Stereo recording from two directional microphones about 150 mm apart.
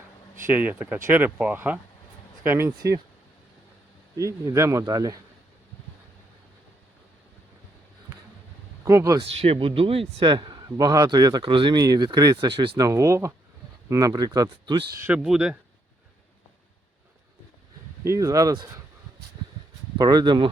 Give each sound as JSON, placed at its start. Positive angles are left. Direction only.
{"t": 0.4, "sound": "speech", "side_deg": -10}
{"t": 4.2, "sound": "a man's voice", "side_deg": -20}
{"t": 8.8, "sound": "speech", "side_deg": -20}
{"t": 9.2, "sound": "a man's voice", "side_deg": -40}
{"t": 15.0, "sound": "speech", "side_deg": -5}
{"t": 18.0, "sound": "a man's voice", "side_deg": -20}
{"t": 20.0, "sound": "a man's voice", "side_deg": -25}